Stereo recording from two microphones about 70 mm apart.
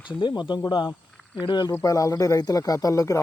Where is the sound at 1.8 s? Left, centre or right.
Left.